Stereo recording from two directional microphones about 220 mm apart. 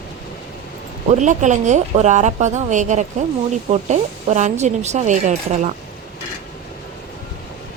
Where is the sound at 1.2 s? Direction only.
35° right (ahead or behind).